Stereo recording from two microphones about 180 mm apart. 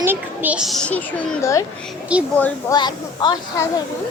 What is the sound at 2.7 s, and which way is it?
Speech, 25° left (ahead or behind).